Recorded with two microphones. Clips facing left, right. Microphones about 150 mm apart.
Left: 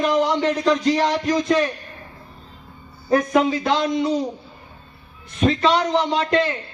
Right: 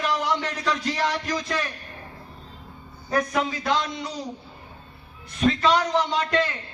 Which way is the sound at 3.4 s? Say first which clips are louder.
Left 6 dB; 25° left (ahead or behind).